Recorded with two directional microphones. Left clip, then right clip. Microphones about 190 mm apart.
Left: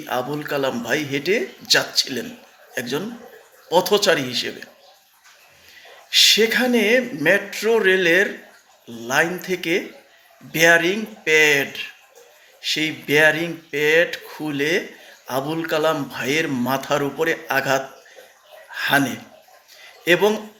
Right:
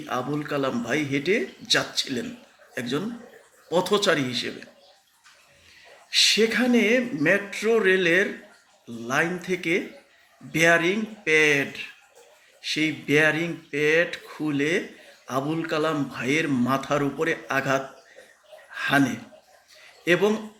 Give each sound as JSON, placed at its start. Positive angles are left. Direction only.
{"t": 0.0, "sound": "speech", "side_deg": -15}
{"t": 6.1, "sound": "speech", "side_deg": -15}